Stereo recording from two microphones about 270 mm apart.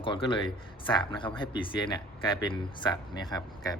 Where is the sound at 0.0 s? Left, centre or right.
Centre.